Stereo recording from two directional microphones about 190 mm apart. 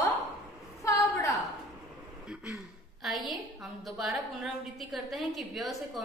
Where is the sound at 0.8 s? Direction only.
15° left (ahead or behind).